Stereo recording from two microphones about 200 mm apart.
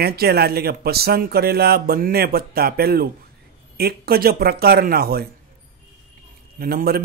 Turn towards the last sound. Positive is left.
turn(degrees=-50)  # may be behind; listen again after turning